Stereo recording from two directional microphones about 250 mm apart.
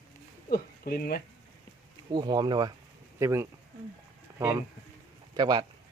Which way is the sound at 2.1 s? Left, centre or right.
Centre.